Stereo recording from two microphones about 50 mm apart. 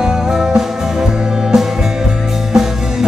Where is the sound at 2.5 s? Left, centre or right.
Centre.